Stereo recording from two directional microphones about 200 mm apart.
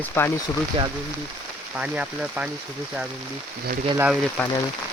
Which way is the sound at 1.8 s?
5° right (ahead or behind).